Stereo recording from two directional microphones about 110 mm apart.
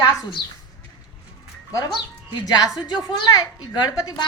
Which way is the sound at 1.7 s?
30° left (ahead or behind).